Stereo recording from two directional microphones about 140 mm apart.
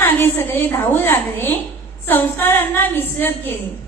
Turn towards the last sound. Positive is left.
turn(degrees=15)  # may be behind; listen again after turning